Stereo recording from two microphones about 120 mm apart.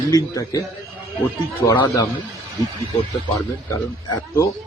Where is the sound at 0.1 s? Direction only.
30° left (ahead or behind).